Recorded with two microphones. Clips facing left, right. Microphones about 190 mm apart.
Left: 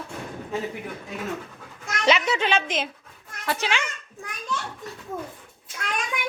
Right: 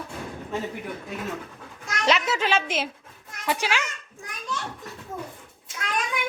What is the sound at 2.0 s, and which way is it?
A woman's voice, centre (ahead or behind).